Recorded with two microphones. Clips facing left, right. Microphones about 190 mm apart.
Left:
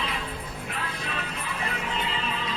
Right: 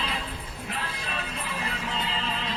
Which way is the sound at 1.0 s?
30° right (ahead or behind).